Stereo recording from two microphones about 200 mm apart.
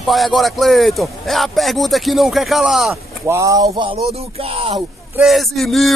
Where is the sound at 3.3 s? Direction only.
15° right (ahead or behind).